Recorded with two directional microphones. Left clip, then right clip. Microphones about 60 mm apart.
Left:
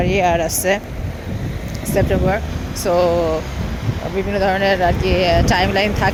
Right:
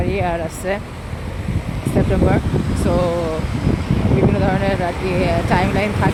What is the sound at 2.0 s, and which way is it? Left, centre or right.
Speech, centre.